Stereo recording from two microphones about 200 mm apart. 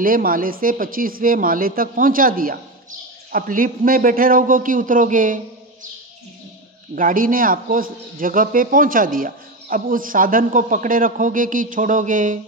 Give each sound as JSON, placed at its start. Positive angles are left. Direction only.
{"t": 0.0, "sound": "a man's voice", "side_deg": -45}
{"t": 7.0, "sound": "a man's voice", "side_deg": -45}